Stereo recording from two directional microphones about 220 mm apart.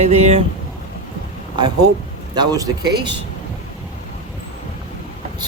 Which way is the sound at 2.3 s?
15° right (ahead or behind).